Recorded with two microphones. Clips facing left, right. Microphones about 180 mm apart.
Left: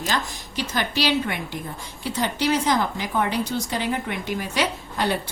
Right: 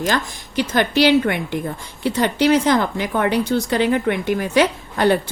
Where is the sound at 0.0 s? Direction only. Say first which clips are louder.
Right 6 dB; 55° right (ahead or behind).